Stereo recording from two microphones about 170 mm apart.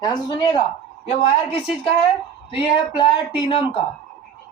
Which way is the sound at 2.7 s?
30° left (ahead or behind).